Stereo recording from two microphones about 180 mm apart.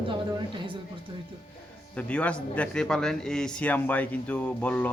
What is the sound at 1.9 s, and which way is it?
Speech, 5° left (ahead or behind).